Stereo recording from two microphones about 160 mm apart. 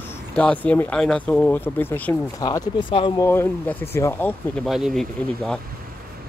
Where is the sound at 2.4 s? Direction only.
25° left (ahead or behind).